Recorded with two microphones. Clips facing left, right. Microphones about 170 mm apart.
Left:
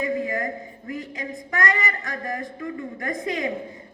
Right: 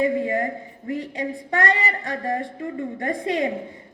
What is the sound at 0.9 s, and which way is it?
A woman's voice, 30° right (ahead or behind).